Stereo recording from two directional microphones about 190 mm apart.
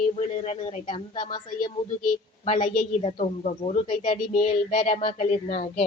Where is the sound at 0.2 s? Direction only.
35° left (ahead or behind).